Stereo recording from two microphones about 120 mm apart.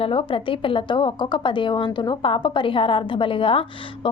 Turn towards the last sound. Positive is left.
turn(degrees=45)  # may be behind; listen again after turning